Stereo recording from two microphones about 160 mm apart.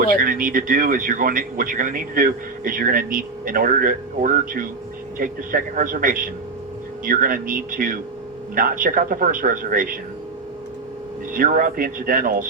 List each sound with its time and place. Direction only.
0.0 s speech: 60° right (ahead or behind)
11.3 s speech: 60° right (ahead or behind)